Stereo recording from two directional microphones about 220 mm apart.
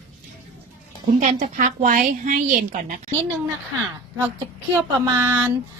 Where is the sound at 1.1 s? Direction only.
30° right (ahead or behind).